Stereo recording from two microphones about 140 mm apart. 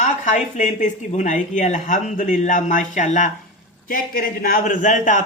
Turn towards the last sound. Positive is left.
turn(degrees=65)  # may be behind; listen again after turning